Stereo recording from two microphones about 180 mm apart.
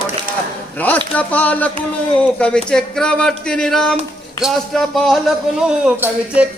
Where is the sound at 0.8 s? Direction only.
10° left (ahead or behind).